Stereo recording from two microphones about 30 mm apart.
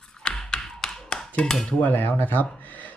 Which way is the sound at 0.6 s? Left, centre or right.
Centre.